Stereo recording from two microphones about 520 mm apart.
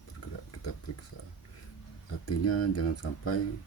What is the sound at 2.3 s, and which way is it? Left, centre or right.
Speech, left.